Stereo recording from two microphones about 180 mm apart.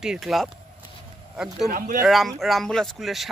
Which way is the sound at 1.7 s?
50° right (ahead or behind).